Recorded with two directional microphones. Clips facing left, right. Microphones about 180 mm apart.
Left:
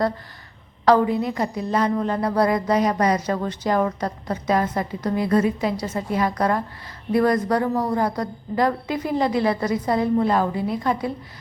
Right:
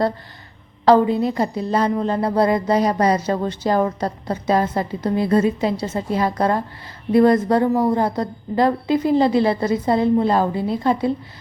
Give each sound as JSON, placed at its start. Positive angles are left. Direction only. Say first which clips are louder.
{"t": 0.9, "sound": "a woman's voice", "louder": "right 3 dB", "side_deg": -25}